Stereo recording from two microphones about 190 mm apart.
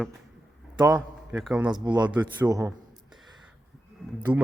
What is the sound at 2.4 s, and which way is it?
Speech, 20° right (ahead or behind).